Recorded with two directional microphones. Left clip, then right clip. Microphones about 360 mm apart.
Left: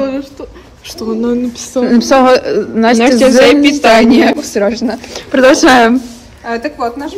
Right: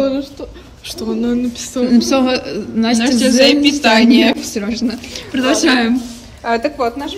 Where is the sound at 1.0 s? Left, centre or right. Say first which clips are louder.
Left 4 dB; centre.